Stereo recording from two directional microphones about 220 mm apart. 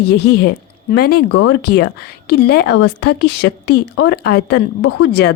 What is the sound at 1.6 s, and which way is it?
Speech, 50° left (ahead or behind).